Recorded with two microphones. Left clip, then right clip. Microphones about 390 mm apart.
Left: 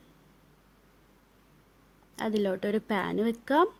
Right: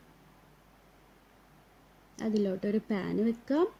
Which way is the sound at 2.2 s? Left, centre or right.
Centre.